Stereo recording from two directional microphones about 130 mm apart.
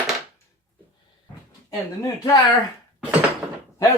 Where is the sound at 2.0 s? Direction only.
25° left (ahead or behind).